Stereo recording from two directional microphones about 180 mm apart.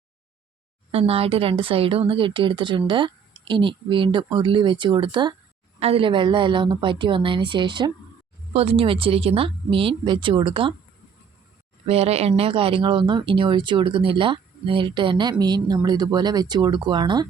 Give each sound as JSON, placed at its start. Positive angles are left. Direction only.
{"t": 0.9, "sound": "speech", "side_deg": -35}
{"t": 11.9, "sound": "speech", "side_deg": -35}